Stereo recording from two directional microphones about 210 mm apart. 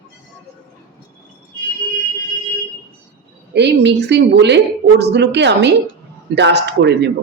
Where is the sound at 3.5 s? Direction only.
55° right (ahead or behind).